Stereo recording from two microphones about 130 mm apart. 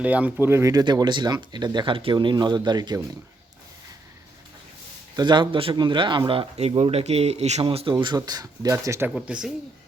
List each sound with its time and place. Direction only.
0.0 s speech: 10° right (ahead or behind); by 3.0 s 35° right (ahead or behind)
5.1 s speech: 35° right (ahead or behind)
6.6 s speech: 50° right (ahead or behind)
7.9 s speech: 35° right (ahead or behind)
9.0 s speech: 5° right (ahead or behind)